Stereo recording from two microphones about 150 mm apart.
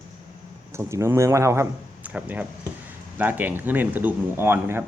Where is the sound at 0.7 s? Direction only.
20° right (ahead or behind).